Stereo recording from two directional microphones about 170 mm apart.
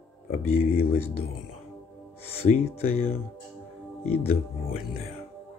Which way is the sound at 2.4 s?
35° left (ahead or behind).